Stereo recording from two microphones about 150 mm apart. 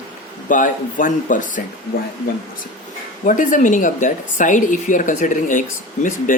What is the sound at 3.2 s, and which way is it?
Speech, 60° left (ahead or behind).